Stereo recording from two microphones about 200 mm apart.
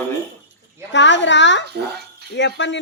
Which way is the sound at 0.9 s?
65° left (ahead or behind).